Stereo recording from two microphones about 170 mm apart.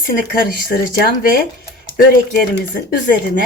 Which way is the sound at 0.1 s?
60° left (ahead or behind).